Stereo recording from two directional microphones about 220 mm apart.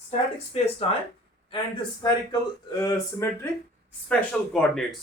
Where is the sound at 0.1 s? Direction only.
30° left (ahead or behind).